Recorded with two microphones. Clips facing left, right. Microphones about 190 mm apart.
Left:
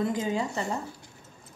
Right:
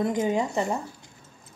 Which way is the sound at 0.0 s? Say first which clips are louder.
Right 3 dB; 20° right (ahead or behind).